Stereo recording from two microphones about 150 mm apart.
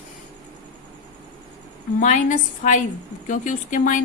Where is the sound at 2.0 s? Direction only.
55° left (ahead or behind).